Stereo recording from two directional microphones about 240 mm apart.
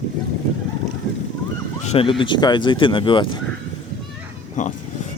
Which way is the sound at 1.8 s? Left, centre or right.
Left.